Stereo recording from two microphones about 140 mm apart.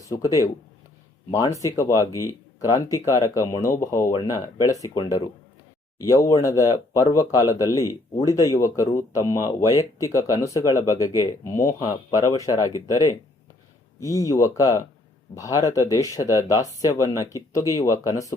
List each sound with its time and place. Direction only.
0.0 s speech: 25° left (ahead or behind)